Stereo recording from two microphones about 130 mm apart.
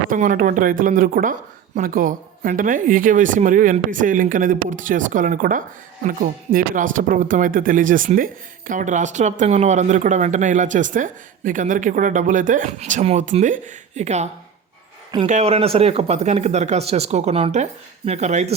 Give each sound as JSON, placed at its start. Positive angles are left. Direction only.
{"t": 0.1, "sound": "speech", "side_deg": -90}
{"t": 12.8, "sound": "speech", "side_deg": -60}
{"t": 15.3, "sound": "speech", "side_deg": -55}